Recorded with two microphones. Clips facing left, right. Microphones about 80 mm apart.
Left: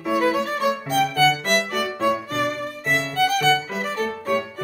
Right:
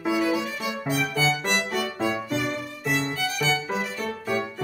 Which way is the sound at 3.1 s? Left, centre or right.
Left.